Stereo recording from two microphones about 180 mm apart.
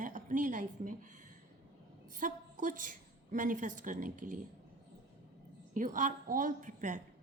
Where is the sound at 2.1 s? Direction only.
45° right (ahead or behind).